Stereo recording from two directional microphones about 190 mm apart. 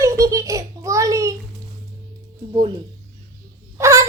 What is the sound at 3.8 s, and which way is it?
Whimper, 15° right (ahead or behind).